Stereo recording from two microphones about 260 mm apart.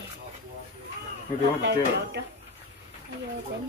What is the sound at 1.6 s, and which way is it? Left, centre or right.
Speech, right.